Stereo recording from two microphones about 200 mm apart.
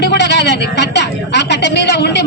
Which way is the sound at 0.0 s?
60° left (ahead or behind).